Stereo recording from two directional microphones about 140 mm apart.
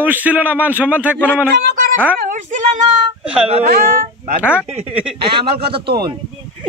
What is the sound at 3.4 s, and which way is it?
Speech, 45° right (ahead or behind).